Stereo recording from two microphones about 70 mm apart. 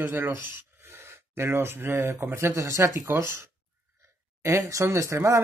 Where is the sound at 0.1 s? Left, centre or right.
Right.